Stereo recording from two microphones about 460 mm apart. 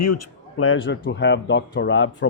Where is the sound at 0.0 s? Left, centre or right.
Left.